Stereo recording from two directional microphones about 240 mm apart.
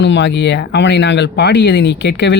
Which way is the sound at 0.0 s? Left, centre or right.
Left.